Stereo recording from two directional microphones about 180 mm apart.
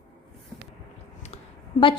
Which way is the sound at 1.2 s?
35° left (ahead or behind).